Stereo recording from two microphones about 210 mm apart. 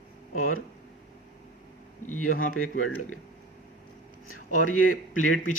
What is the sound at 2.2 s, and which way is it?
Speech, 75° left (ahead or behind).